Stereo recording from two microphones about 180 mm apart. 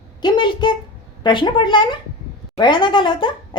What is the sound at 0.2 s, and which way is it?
Speech, 25° left (ahead or behind).